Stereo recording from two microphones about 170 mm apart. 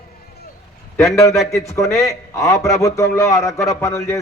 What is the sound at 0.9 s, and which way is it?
A man's voice, 15° left (ahead or behind).